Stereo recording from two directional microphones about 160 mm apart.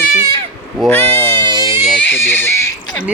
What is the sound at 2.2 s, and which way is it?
Speech, 15° left (ahead or behind).